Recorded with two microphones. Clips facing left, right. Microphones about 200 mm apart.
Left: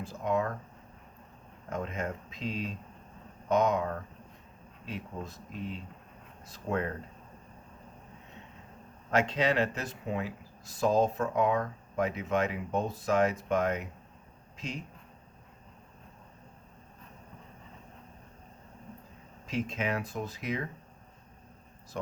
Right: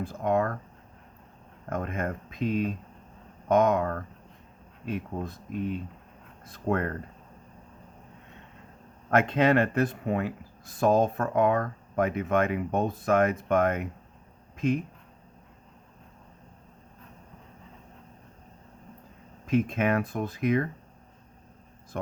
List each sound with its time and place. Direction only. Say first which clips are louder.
0.0 s speech: right 4 dB; 55° right (ahead or behind)
1.7 s speech: right 4 dB; 55° right (ahead or behind)
9.0 s speech: right 5 dB; 55° right (ahead or behind)
19.5 s speech: right 8 dB; 55° right (ahead or behind)
21.9 s speech: right 3 dB; 55° right (ahead or behind)